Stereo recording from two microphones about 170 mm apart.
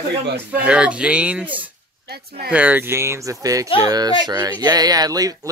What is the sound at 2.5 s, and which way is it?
Speech, 10° right (ahead or behind).